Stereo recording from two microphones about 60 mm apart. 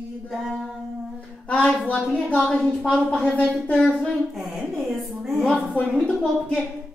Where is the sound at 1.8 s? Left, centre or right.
Left.